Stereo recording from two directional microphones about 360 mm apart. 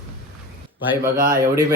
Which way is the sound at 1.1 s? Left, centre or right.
Right.